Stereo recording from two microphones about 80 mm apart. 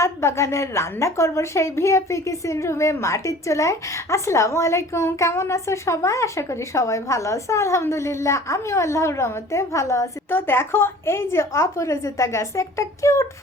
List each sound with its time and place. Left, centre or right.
0.0 s a woman's voice: left